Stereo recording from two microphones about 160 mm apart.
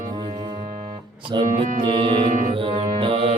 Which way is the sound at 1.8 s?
30° right (ahead or behind).